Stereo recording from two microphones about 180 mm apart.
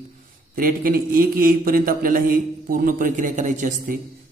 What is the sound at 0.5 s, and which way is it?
A man's voice, 50° right (ahead or behind).